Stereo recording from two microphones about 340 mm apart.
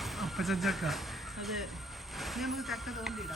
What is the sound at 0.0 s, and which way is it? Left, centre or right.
Speech, centre.